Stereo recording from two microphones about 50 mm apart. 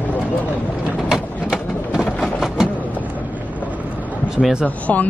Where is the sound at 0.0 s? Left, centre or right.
Left.